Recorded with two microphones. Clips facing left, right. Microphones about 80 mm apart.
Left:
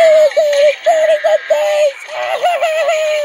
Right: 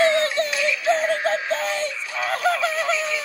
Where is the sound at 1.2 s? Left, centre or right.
Left.